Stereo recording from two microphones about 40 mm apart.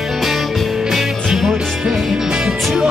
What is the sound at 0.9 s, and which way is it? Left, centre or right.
Music, centre.